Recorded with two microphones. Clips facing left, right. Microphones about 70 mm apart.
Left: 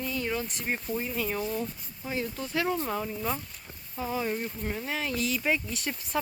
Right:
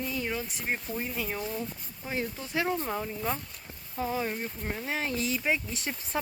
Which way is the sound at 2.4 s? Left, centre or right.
Centre.